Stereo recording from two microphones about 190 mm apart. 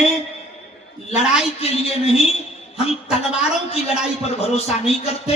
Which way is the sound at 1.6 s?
30° left (ahead or behind).